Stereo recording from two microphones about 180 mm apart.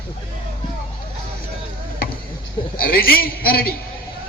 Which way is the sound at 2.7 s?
55° left (ahead or behind).